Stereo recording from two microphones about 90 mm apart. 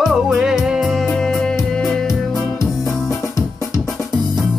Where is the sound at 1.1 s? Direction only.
10° left (ahead or behind).